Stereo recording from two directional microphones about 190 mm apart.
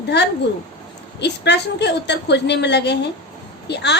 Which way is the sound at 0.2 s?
65° left (ahead or behind).